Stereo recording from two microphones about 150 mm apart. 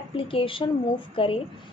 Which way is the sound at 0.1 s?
35° left (ahead or behind).